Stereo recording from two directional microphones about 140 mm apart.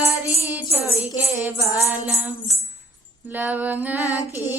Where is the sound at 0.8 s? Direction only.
20° left (ahead or behind).